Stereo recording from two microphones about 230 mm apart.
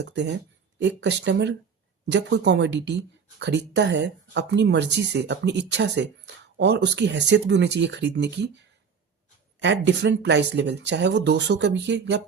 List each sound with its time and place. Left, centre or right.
0.0 s speech: right